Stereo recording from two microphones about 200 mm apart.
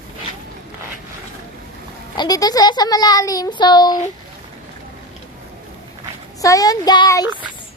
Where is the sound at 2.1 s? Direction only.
20° left (ahead or behind).